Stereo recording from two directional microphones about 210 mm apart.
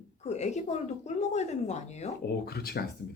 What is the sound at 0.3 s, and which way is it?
Speech, 35° left (ahead or behind).